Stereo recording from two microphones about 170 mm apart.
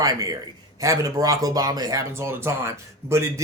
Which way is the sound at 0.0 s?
20° right (ahead or behind).